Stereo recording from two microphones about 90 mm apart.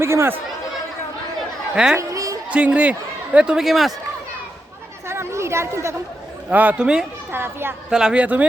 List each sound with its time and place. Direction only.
0.0 s a child's voice: 30° right (ahead or behind)
1.7 s speech: 5° right (ahead or behind)
2.0 s chatter: 40° right (ahead or behind)
2.5 s speech: 15° right (ahead or behind)
5.0 s chatter: 30° right (ahead or behind)
6.5 s speech: 15° right (ahead or behind)
7.3 s a child's voice: 25° right (ahead or behind)
7.9 s speech: 10° right (ahead or behind)